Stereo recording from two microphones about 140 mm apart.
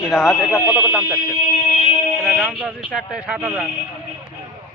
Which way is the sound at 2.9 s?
10° right (ahead or behind).